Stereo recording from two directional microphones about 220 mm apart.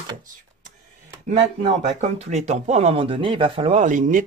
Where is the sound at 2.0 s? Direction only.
30° right (ahead or behind).